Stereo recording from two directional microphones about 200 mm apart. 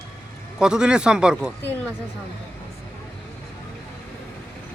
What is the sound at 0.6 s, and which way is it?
Speech, 5° right (ahead or behind).